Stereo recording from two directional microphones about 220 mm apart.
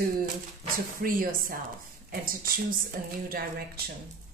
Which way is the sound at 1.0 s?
40° right (ahead or behind).